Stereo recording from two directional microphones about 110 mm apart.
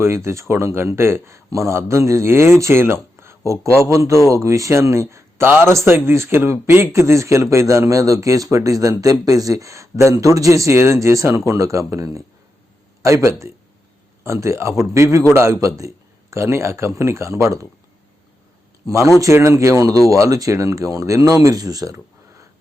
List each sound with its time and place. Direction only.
0.0 s a man's voice: 25° right (ahead or behind)
18.9 s a man's voice: 30° right (ahead or behind)